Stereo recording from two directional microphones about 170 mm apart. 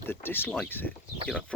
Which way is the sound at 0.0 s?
15° left (ahead or behind).